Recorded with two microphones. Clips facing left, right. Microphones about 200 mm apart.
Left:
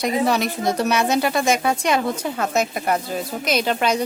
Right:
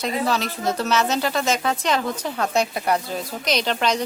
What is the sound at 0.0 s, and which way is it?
Speech, 15° left (ahead or behind).